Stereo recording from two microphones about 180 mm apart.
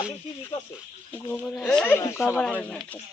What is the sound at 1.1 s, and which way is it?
Speech, 5° left (ahead or behind).